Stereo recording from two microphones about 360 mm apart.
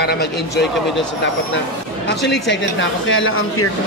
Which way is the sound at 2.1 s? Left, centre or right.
Left.